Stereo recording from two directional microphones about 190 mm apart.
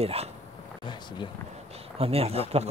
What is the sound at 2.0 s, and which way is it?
Speech, 30° right (ahead or behind).